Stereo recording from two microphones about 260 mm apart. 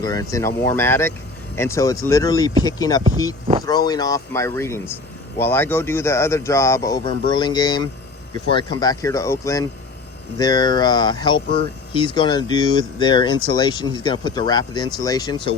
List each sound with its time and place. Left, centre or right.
0.0 s speech: centre